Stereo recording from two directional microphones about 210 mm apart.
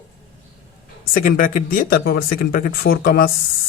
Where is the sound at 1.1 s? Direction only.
40° left (ahead or behind).